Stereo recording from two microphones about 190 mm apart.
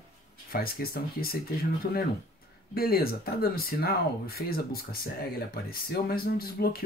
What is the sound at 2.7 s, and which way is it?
Speech, 55° left (ahead or behind).